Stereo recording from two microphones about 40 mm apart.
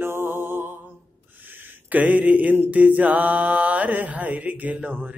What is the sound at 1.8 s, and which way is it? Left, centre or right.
Mantra, right.